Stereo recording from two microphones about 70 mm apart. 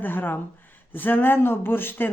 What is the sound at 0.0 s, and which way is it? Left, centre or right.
Speech, left.